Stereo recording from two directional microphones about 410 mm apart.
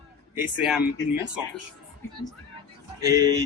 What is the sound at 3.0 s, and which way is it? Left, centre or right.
Speech, centre.